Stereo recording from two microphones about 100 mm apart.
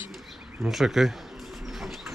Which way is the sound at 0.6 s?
5° right (ahead or behind).